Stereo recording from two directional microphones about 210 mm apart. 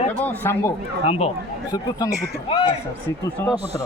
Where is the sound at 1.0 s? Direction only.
30° left (ahead or behind).